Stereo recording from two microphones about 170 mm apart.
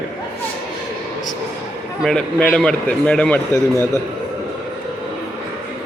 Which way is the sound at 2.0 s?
5° left (ahead or behind).